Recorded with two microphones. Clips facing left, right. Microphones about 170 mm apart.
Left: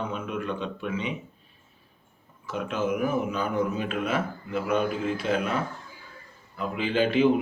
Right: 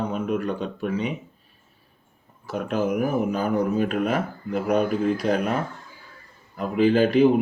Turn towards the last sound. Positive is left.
turn(degrees=-40)  # may be behind; listen again after turning